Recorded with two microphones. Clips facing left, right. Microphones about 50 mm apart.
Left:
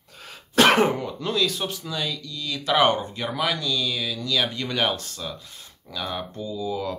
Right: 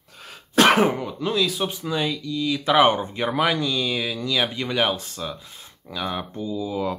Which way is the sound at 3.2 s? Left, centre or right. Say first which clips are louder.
Right 4 dB; right.